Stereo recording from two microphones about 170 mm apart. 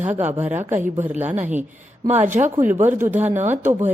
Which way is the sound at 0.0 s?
10° right (ahead or behind).